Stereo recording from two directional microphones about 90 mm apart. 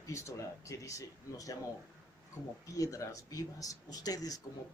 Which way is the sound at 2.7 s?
35° left (ahead or behind).